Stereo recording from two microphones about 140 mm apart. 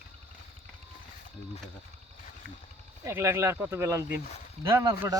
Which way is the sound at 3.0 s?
20° right (ahead or behind).